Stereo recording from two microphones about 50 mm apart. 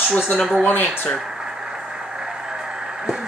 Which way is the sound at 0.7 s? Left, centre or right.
Left.